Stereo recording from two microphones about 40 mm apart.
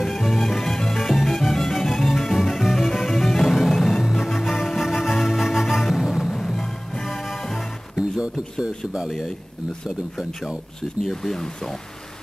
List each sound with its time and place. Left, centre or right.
0.0 s music: centre
6.3 s music: centre
8.6 s speech: centre
11.1 s speech: centre